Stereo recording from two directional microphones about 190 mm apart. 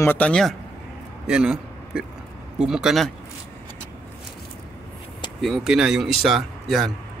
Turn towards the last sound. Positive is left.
turn(degrees=0)  # may be behind; listen again after turning